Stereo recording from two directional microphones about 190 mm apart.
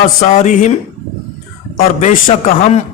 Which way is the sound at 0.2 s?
40° left (ahead or behind).